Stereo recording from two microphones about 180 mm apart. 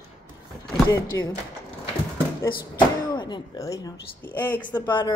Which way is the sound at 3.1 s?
25° left (ahead or behind).